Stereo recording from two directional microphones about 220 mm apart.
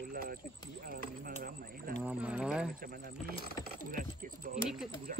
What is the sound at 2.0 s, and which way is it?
Speech, 5° right (ahead or behind).